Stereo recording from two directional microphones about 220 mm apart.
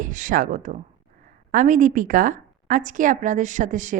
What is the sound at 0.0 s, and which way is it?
A woman's voice, 35° right (ahead or behind).